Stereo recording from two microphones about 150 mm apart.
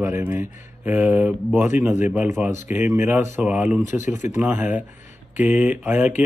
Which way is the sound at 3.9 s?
55° left (ahead or behind).